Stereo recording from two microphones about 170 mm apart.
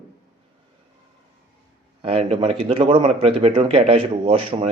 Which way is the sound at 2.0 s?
35° right (ahead or behind).